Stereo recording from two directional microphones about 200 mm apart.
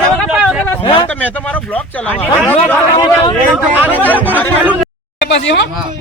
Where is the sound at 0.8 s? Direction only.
25° left (ahead or behind).